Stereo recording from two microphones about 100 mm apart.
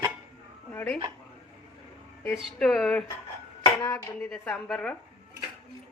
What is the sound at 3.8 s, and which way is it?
Speech, 25° left (ahead or behind).